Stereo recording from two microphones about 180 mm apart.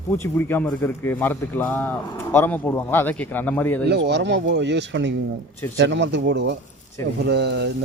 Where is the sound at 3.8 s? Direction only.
70° right (ahead or behind).